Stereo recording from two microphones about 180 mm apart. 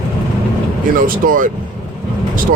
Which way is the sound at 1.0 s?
50° right (ahead or behind).